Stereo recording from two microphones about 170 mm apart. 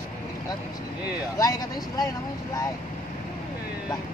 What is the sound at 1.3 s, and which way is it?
Speech, 20° left (ahead or behind).